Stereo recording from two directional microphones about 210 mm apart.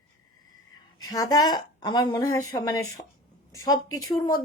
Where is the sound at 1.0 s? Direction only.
15° left (ahead or behind).